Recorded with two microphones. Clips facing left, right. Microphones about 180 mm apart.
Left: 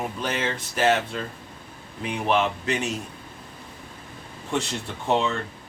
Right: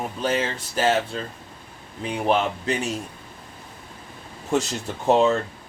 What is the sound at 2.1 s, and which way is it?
Speech, 35° right (ahead or behind).